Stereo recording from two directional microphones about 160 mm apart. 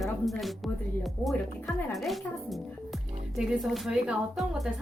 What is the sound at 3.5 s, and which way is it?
A woman's voice, centre (ahead or behind).